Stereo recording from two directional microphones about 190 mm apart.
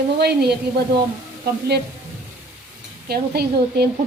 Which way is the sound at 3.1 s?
55° right (ahead or behind).